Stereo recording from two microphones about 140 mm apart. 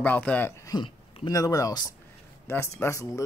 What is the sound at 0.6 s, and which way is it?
Speech, 30° left (ahead or behind).